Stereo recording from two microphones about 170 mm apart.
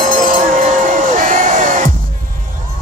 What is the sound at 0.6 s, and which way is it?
Music, 55° right (ahead or behind).